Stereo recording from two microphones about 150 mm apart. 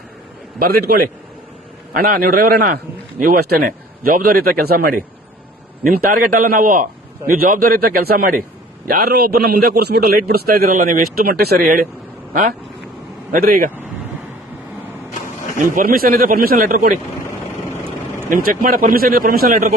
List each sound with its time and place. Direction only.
1.9 s a man's voice: 70° right (ahead or behind)
15.5 s speech: 65° right (ahead or behind)
18.3 s speech: 65° right (ahead or behind)